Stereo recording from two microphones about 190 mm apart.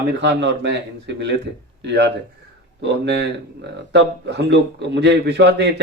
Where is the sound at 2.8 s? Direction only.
65° right (ahead or behind).